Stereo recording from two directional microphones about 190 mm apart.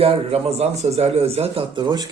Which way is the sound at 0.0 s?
30° right (ahead or behind).